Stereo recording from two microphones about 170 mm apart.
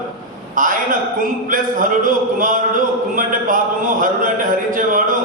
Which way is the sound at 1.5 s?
55° right (ahead or behind).